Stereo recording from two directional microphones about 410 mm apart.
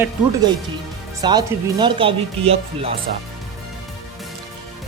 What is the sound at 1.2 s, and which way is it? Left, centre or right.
Speech, centre.